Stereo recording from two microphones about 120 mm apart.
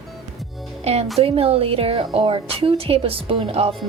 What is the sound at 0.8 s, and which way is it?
Speech, 60° right (ahead or behind).